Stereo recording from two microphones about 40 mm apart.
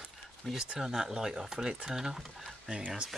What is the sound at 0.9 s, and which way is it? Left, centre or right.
Speech, centre.